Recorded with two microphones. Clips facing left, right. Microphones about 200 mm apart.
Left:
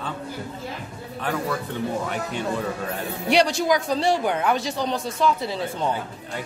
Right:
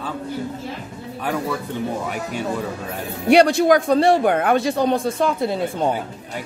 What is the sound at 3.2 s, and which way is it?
Speech, 55° right (ahead or behind).